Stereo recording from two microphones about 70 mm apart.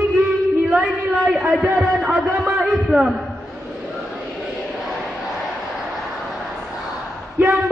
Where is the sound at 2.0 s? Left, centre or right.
Centre.